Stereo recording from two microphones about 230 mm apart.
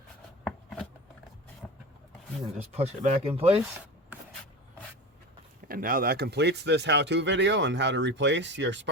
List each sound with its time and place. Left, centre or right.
0.4 s a sound: centre
2.4 s speech: right
5.6 s speech: right